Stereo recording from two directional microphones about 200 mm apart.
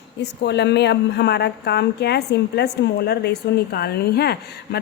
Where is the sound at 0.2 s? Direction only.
60° left (ahead or behind).